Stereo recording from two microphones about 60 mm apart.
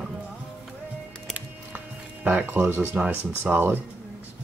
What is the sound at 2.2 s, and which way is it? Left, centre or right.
Speech, right.